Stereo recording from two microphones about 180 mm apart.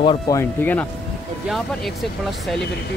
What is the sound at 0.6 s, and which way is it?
Speech, 10° left (ahead or behind).